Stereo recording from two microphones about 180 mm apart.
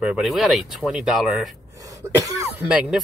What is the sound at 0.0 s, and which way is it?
Speech, centre (ahead or behind).